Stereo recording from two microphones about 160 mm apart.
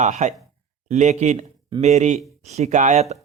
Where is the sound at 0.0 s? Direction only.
45° right (ahead or behind).